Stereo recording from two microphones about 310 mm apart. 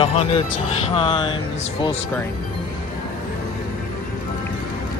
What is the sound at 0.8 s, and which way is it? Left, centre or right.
Music, centre.